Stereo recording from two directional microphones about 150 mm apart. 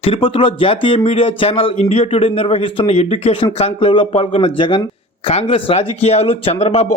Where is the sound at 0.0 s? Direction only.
40° left (ahead or behind).